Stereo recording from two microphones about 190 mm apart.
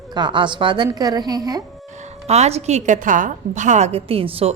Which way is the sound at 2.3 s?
35° right (ahead or behind).